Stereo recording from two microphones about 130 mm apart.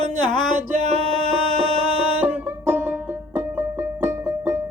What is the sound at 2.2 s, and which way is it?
Music, 15° right (ahead or behind).